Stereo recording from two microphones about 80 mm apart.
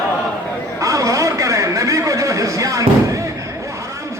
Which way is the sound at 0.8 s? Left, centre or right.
Right.